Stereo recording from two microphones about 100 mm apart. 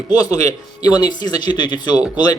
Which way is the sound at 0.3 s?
35° left (ahead or behind).